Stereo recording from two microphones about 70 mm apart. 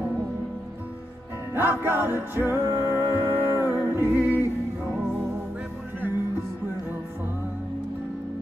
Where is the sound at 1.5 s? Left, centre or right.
Right.